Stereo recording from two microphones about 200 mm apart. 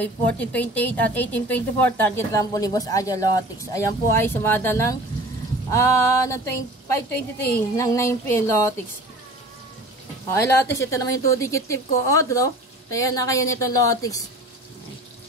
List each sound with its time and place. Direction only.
0.0 s a woman's voice: 10° left (ahead or behind)
7.2 s a woman's voice: 50° left (ahead or behind)
7.7 s a woman's voice: 15° left (ahead or behind)
10.3 s a woman's voice: 10° left (ahead or behind)